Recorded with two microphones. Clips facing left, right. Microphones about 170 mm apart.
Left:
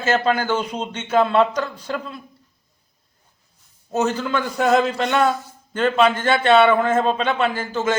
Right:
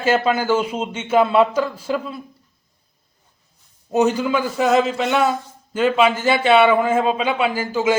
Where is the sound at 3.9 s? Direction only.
15° right (ahead or behind).